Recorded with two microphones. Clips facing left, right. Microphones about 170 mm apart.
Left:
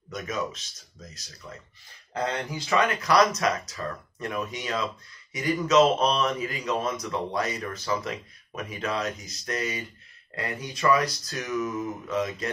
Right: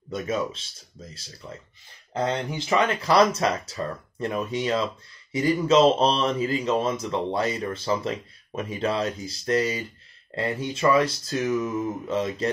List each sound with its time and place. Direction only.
0.1 s speech: 30° right (ahead or behind)